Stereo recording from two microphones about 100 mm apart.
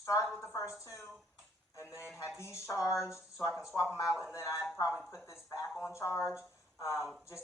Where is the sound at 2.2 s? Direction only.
25° left (ahead or behind).